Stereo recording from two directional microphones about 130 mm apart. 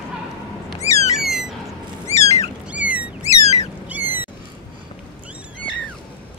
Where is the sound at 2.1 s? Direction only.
55° left (ahead or behind).